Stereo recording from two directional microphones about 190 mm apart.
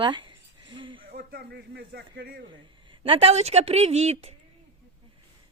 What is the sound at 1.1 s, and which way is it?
Speech, 55° right (ahead or behind).